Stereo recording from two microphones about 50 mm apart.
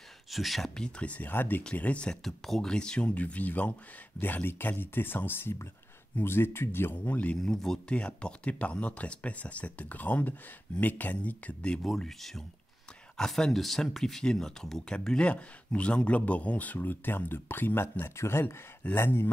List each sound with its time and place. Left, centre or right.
0.3 s speech: centre
0.7 s speech: centre
1.0 s speech: left
1.3 s speech: left
1.8 s speech: left
2.2 s speech: centre; by 7.0 s left
7.1 s speech: left
7.3 s speech: centre
7.9 s speech: left
11.8 s speech: centre; by 17.8 s left
18.0 s speech: left
18.9 s speech: left